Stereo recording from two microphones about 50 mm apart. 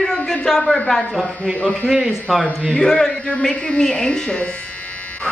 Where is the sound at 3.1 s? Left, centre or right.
Left.